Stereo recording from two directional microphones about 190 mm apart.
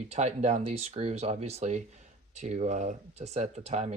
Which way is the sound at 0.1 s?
35° right (ahead or behind).